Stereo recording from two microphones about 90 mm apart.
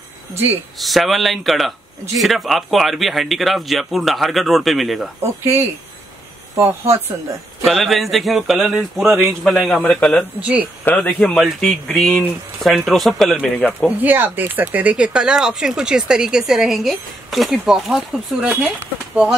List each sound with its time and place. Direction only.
0.7 s speech: centre (ahead or behind)
5.2 s speech: 30° right (ahead or behind)
7.6 s speech: centre (ahead or behind)
10.4 s speech: 15° right (ahead or behind)
10.8 s speech: 15° left (ahead or behind)
13.8 s speech: 20° right (ahead or behind); by 18.2 s 5° right (ahead or behind)
18.4 s speech: 15° right (ahead or behind)